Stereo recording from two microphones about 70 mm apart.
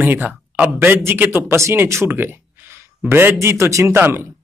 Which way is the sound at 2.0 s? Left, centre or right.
Right.